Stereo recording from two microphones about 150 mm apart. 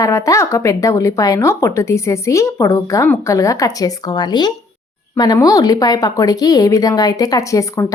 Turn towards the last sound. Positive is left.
turn(degrees=20)  # may be behind; listen again after turning